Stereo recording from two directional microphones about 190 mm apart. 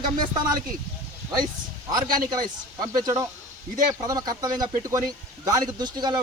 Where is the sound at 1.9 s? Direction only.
20° right (ahead or behind).